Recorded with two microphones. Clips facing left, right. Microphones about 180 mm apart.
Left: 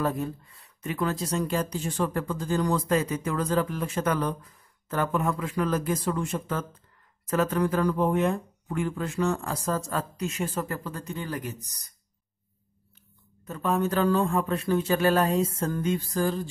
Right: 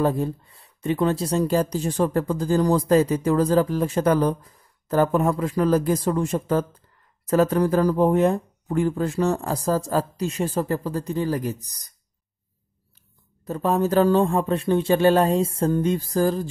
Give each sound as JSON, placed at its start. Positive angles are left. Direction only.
{"t": 0.0, "sound": "speech", "side_deg": -30}
{"t": 13.5, "sound": "speech", "side_deg": -35}